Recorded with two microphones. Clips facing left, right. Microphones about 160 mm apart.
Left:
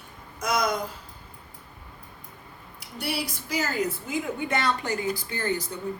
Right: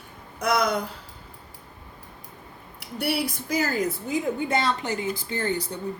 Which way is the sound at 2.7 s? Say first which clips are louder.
Right 5 dB; 60° right (ahead or behind).